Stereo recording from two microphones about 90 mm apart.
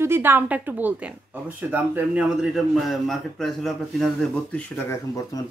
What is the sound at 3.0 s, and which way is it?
Speech, centre (ahead or behind).